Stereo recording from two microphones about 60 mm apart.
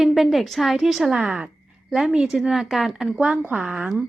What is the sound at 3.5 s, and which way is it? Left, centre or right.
Speech, right.